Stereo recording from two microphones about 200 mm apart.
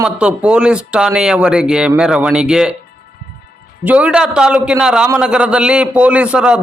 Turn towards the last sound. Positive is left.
turn(degrees=-5)  # may be behind; listen again after turning